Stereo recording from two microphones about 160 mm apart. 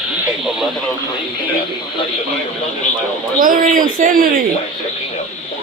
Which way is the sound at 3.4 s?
60° right (ahead or behind).